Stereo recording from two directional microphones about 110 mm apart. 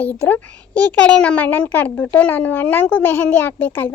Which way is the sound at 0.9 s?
10° left (ahead or behind).